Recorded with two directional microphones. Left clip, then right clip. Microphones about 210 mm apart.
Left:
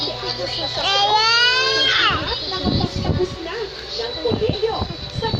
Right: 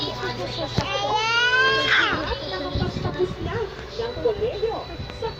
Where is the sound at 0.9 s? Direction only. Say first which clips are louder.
Left 7 dB; 50° left (ahead or behind).